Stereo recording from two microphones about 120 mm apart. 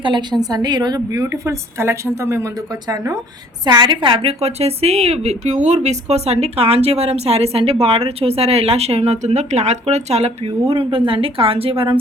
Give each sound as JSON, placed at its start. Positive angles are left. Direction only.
{"t": 0.0, "sound": "a woman's voice", "side_deg": -40}